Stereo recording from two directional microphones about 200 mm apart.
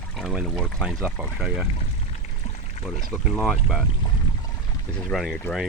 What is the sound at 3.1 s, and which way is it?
Speech, centre (ahead or behind).